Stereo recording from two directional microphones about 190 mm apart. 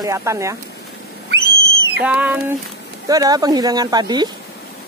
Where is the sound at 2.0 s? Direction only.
5° right (ahead or behind).